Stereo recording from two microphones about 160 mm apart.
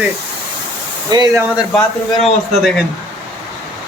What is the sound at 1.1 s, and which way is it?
Speech, 25° right (ahead or behind).